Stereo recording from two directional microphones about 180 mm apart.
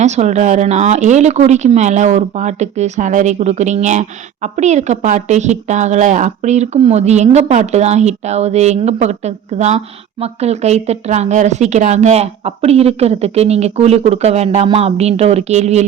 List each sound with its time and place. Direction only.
0.0 s a woman's voice: 40° right (ahead or behind)